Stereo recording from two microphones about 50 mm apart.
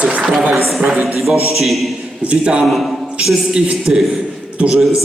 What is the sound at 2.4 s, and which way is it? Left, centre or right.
A man's voice, centre.